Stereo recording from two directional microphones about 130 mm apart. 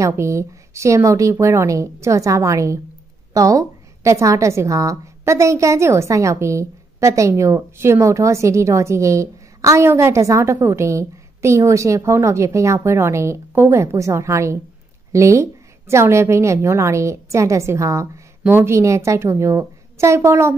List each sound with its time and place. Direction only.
0.0 s a woman's voice: 20° right (ahead or behind)